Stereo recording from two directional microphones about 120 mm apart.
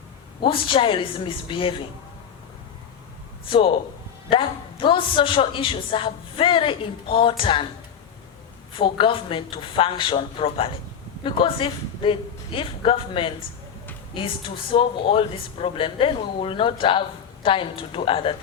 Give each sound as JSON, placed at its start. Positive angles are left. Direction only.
{"t": 0.4, "sound": "a woman's voice", "side_deg": 45}
{"t": 3.4, "sound": "a man's voice", "side_deg": 45}
{"t": 8.7, "sound": "a woman's voice", "side_deg": 45}